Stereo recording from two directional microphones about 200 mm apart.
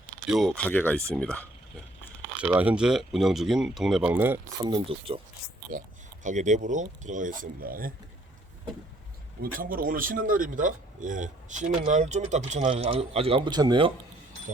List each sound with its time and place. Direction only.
0.3 s speech: centre (ahead or behind)
2.4 s speech: 5° right (ahead or behind)
4.6 s speech: 25° right (ahead or behind)
6.2 s speech: 35° right (ahead or behind)
9.4 s speech: 45° right (ahead or behind); by 13.9 s 25° right (ahead or behind)